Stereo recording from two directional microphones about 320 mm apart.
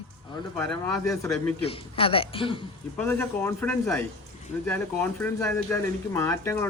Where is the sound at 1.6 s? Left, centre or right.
Centre.